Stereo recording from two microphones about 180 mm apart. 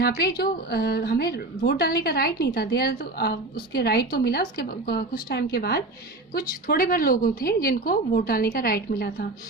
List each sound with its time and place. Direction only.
0.0 s a woman's voice: 60° left (ahead or behind)